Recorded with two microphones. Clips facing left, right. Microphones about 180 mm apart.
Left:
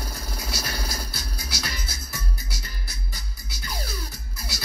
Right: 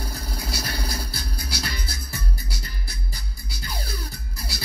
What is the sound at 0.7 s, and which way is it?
Music, 60° right (ahead or behind).